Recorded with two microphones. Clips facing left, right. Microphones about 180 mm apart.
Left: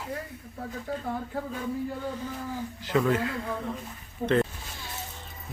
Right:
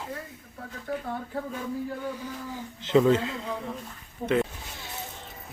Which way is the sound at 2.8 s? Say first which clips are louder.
Right 5 dB; 25° right (ahead or behind).